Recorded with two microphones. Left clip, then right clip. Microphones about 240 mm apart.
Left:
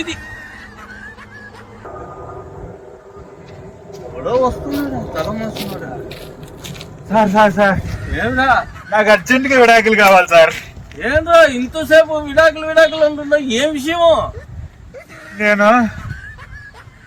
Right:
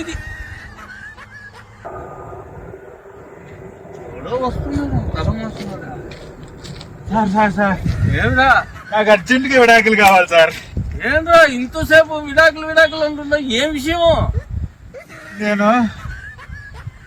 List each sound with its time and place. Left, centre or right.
0.0 s neigh: centre
4.2 s a sound: centre
5.1 s a man's voice: centre
7.1 s a man's voice: centre
7.9 s a man's voice: centre
14.9 s a sound: centre
15.5 s a man's voice: centre
15.8 s fowl: centre